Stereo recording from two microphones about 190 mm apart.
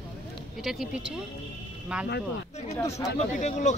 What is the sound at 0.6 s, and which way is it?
Speech, centre (ahead or behind).